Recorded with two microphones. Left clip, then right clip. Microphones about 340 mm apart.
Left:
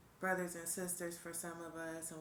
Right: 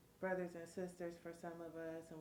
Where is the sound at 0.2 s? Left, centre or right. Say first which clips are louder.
Left 4 dB; right.